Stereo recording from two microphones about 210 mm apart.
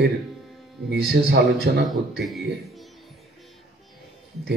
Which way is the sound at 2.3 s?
Centre (ahead or behind).